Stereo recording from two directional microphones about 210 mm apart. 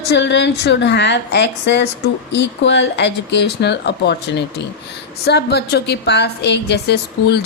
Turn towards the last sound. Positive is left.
turn(degrees=50)  # may be behind; listen again after turning